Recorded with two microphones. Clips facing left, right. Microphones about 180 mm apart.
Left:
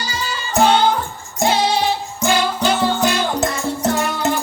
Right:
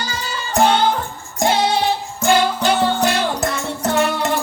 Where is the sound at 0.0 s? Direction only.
55° right (ahead or behind).